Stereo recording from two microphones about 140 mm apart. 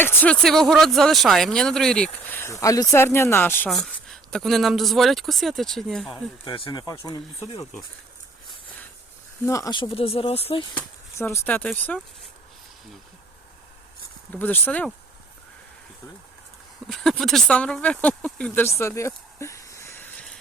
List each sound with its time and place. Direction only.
0.0 s speech: 15° left (ahead or behind)
0.4 s speech: 5° left (ahead or behind)
3.7 s speech: centre (ahead or behind)
6.1 s speech: 30° left (ahead or behind)
9.5 s speech: 20° left (ahead or behind)
9.9 s speech: 40° left (ahead or behind)
11.2 s speech: 15° left (ahead or behind)
14.3 s speech: 15° left (ahead or behind)
16.8 s speech: 5° left (ahead or behind); by 20.1 s 20° left (ahead or behind)
20.1 s music: 5° left (ahead or behind)